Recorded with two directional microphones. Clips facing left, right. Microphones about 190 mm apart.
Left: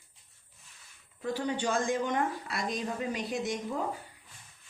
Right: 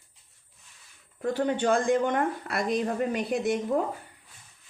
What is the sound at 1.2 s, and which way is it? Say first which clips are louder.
Speech: right 6 dB; 55° right (ahead or behind).